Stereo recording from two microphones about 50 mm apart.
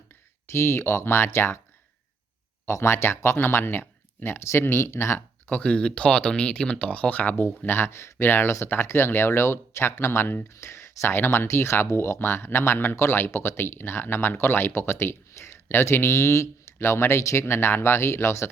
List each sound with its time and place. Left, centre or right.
0.5 s speech: left
2.6 s speech: left
5.5 s speech: left
7.7 s speech: left
8.2 s speech: left
8.4 s speech: left
16.7 s speech: left